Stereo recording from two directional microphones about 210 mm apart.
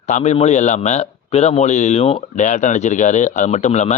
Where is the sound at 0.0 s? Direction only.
35° left (ahead or behind).